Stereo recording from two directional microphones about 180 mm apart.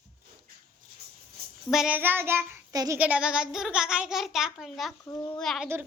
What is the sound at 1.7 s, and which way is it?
A child's voice, 5° right (ahead or behind).